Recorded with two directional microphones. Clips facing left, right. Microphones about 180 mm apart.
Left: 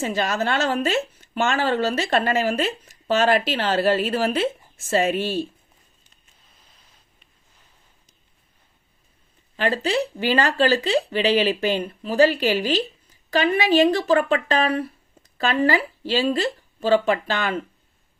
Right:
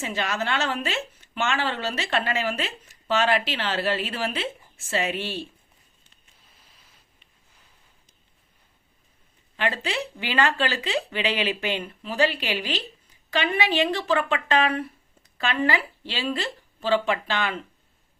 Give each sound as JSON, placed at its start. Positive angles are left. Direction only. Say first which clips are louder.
{"t": 0.0, "sound": "speech", "louder": "left 5 dB", "side_deg": 40}
{"t": 9.6, "sound": "speech", "louder": "left 6 dB", "side_deg": 35}